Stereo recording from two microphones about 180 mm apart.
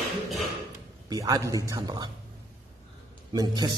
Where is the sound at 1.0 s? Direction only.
20° right (ahead or behind).